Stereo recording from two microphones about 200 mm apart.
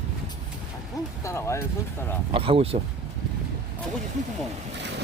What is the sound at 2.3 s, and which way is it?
Speech, 30° right (ahead or behind).